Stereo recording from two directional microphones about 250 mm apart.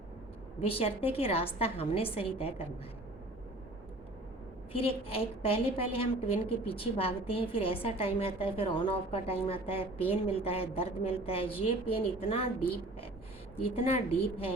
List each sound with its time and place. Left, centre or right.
0.6 s a woman's voice: left
4.7 s a woman's voice: left